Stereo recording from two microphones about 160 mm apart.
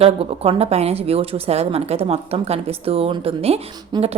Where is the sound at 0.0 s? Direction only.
40° right (ahead or behind).